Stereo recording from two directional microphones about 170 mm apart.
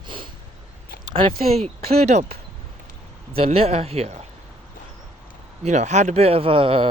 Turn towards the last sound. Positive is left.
turn(degrees=-30)  # may be behind; listen again after turning